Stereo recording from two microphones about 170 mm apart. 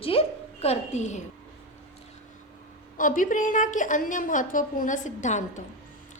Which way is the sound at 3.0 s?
50° left (ahead or behind).